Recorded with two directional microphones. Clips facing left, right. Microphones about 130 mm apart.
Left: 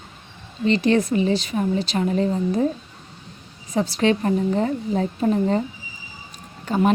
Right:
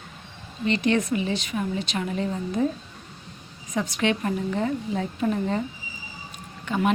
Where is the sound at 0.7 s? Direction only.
35° left (ahead or behind).